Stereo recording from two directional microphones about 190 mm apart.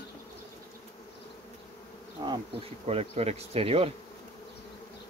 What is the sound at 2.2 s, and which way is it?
Bee, 30° right (ahead or behind).